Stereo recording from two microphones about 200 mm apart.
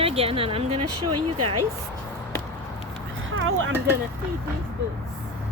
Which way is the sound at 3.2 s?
90° right.